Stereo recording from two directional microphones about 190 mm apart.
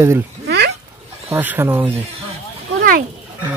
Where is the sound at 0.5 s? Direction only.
60° right (ahead or behind).